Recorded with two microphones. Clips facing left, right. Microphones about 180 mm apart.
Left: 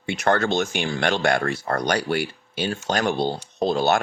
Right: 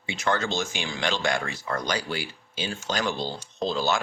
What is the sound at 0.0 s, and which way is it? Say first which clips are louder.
Speech: left 6 dB; 60° left (ahead or behind).